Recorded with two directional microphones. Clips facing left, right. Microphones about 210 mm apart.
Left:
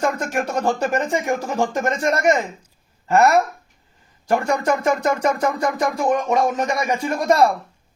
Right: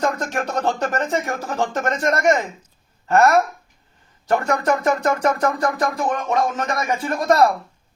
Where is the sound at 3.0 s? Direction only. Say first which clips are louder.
Even; 10° left (ahead or behind).